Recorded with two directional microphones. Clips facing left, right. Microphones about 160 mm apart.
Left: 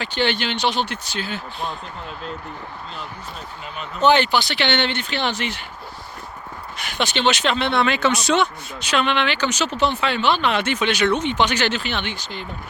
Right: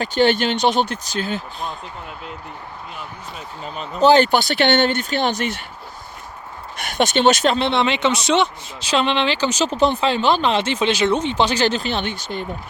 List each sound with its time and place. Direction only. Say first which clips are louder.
0.0 s speech: right 6 dB; 45° right (ahead or behind)
3.8 s speech: right 4 dB; 35° right (ahead or behind)
4.3 s speech: right 4 dB; 50° right (ahead or behind)
6.7 s speech: right 6 dB; 45° right (ahead or behind)
7.7 s speech: right 1 dB; 20° right (ahead or behind); by 12.5 s 50° right (ahead or behind)